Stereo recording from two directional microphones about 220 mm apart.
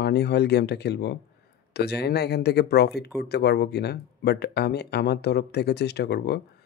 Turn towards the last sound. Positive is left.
turn(degrees=50)  # may be behind; listen again after turning